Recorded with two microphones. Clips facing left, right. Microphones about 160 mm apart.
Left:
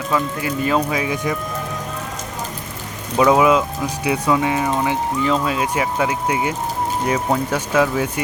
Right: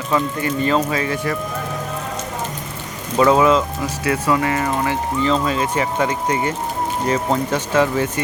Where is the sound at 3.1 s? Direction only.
10° left (ahead or behind).